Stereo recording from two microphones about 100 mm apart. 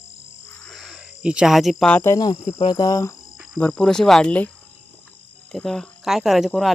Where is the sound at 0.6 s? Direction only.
Centre (ahead or behind).